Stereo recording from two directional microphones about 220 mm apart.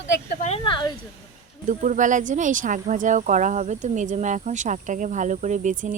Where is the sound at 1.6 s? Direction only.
35° right (ahead or behind).